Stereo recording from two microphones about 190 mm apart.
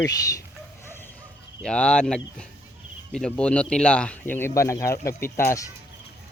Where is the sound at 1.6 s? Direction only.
5° left (ahead or behind).